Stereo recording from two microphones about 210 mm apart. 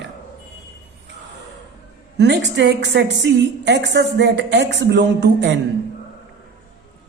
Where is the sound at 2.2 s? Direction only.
55° right (ahead or behind).